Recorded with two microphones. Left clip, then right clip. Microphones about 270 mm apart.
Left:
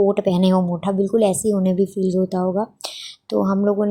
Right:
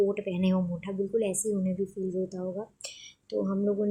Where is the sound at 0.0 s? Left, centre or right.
Left.